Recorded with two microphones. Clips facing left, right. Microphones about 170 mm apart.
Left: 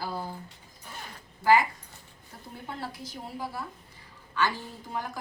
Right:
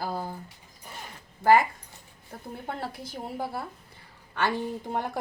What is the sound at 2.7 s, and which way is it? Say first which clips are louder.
A woman's voice: right 2 dB; 55° right (ahead or behind).